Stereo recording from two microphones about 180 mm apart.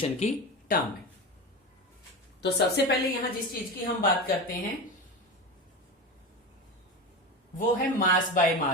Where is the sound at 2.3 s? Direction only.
70° left (ahead or behind).